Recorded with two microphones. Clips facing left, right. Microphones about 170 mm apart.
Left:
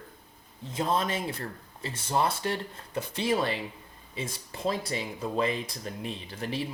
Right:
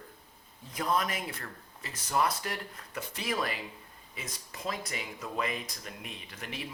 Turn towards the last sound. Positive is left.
turn(degrees=30)  # may be behind; listen again after turning